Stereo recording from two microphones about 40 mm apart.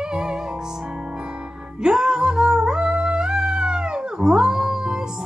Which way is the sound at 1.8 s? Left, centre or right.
Right.